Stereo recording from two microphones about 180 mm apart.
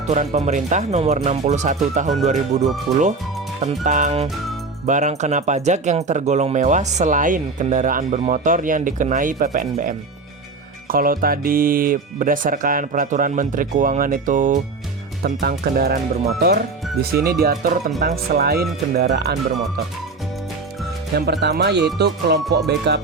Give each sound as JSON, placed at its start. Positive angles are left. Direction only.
{"t": 0.1, "sound": "speech", "side_deg": -40}
{"t": 15.2, "sound": "speech", "side_deg": -60}
{"t": 18.0, "sound": "speech", "side_deg": -60}
{"t": 21.2, "sound": "speech", "side_deg": -65}
{"t": 21.9, "sound": "music", "side_deg": -65}